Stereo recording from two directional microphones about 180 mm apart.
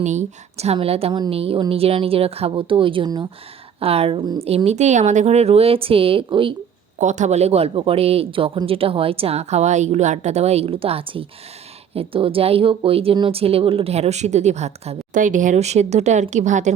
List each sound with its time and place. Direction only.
0.0 s speech: 40° right (ahead or behind)
7.0 s speech: 40° right (ahead or behind)